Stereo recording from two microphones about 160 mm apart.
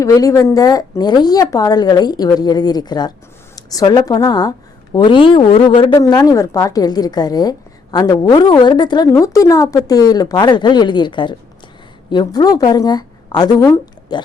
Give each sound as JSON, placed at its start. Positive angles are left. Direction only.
{"t": 0.0, "sound": "a woman's voice", "side_deg": 20}